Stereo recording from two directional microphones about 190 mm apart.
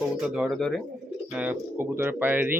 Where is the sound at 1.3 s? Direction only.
10° right (ahead or behind).